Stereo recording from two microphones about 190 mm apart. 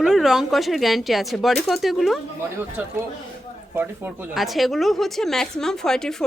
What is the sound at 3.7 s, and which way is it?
A woman's voice, 10° right (ahead or behind).